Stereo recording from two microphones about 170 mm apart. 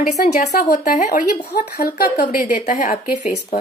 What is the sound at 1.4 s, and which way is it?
Speech, 70° left (ahead or behind).